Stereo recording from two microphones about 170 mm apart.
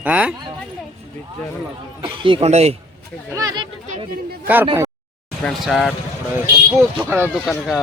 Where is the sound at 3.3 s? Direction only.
20° right (ahead or behind).